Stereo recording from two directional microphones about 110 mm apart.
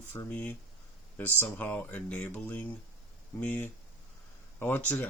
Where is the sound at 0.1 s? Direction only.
30° left (ahead or behind).